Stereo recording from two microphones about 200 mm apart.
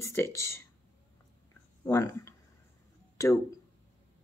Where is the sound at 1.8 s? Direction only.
15° left (ahead or behind).